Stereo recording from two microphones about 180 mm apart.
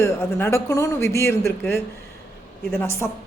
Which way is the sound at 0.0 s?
15° left (ahead or behind).